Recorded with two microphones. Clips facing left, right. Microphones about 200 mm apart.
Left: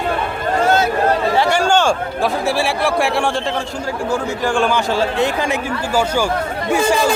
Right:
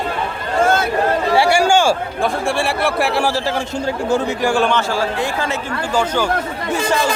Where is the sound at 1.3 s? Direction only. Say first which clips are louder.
Right 1 dB; 10° right (ahead or behind).